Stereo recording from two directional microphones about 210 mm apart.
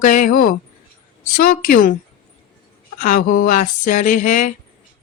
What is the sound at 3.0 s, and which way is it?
Speech, 40° left (ahead or behind).